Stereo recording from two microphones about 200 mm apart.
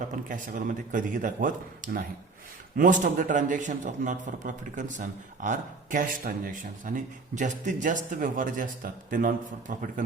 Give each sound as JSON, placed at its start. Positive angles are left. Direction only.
{"t": 0.3, "sound": "a man's voice", "side_deg": -40}